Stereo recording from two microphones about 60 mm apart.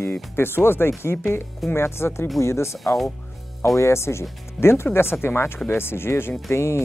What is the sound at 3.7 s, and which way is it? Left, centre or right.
Speech, left.